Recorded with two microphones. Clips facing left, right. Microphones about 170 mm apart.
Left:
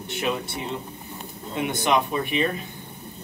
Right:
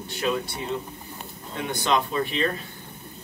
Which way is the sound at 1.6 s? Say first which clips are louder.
Left 2 dB; 15° left (ahead or behind).